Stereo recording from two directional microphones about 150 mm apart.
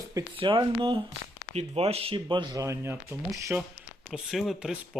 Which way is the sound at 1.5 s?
45° right (ahead or behind).